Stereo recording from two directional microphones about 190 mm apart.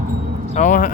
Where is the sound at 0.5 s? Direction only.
40° left (ahead or behind).